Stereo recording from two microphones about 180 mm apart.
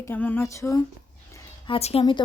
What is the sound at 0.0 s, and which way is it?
Speech, 10° left (ahead or behind).